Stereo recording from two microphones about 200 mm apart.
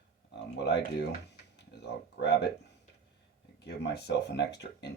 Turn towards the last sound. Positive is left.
turn(degrees=60)  # may be behind; listen again after turning